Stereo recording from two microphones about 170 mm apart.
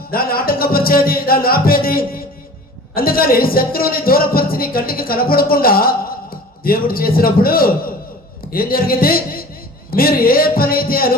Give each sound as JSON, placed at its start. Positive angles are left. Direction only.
{"t": 0.1, "sound": "speech", "side_deg": 60}